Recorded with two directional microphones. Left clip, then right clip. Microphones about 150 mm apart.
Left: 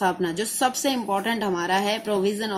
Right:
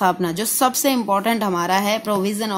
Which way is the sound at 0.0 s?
35° right (ahead or behind).